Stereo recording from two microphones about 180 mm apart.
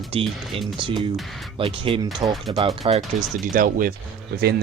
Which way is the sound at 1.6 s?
30° right (ahead or behind).